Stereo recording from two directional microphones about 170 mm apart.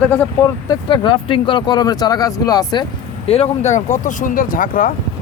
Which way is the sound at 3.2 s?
35° left (ahead or behind).